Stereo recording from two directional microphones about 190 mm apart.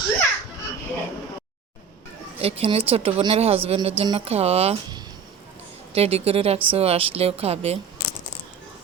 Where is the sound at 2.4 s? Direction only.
30° right (ahead or behind).